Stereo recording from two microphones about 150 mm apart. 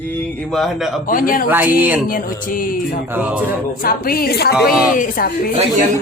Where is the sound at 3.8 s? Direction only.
80° left.